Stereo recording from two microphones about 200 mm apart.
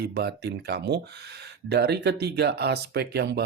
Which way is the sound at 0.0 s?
55° right (ahead or behind).